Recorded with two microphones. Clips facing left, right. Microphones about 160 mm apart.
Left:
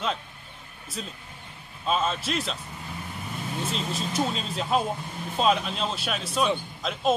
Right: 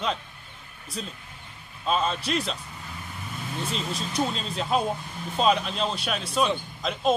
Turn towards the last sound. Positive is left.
turn(degrees=5)  # may be behind; listen again after turning